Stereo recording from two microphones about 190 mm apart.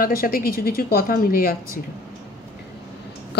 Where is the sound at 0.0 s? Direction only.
50° left (ahead or behind).